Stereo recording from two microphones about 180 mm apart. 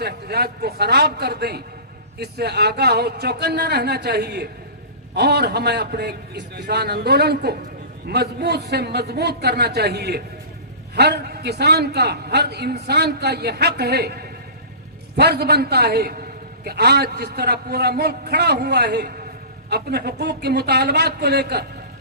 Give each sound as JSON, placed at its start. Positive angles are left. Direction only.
{"t": 0.0, "sound": "a man's voice", "side_deg": -65}